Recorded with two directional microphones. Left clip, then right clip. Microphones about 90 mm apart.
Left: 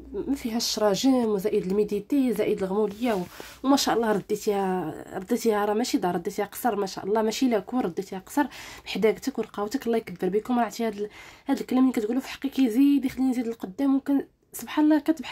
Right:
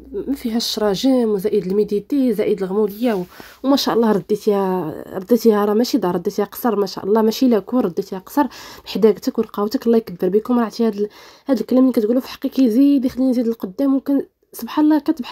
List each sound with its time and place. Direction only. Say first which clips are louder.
0.3 s speech: right 6 dB; 35° right (ahead or behind)
4.6 s speech: right 7 dB; 60° right (ahead or behind)
4.9 s speech: right 11 dB; 30° right (ahead or behind)